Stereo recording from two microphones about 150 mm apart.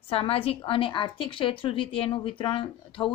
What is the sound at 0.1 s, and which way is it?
A woman's voice, 40° left (ahead or behind).